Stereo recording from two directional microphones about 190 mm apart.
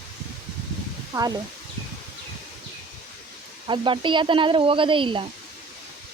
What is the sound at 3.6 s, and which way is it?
Speech, 25° right (ahead or behind).